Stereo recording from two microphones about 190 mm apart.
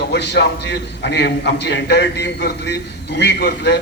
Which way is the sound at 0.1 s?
60° left (ahead or behind).